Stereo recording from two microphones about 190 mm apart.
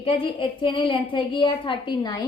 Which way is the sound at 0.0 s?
25° left (ahead or behind).